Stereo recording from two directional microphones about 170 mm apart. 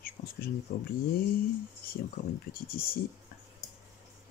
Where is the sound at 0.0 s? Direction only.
60° left (ahead or behind).